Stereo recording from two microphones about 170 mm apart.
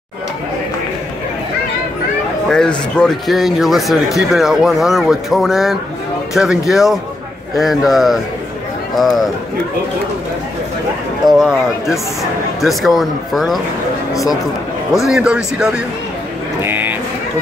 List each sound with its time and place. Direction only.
3.0 s speech: centre (ahead or behind)
11.3 s speech: centre (ahead or behind)
16.6 s a sound: 10° right (ahead or behind)